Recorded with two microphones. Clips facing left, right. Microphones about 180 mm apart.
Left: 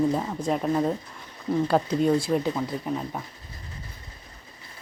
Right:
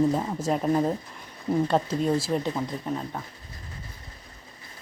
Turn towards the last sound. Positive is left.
turn(degrees=5)  # may be behind; listen again after turning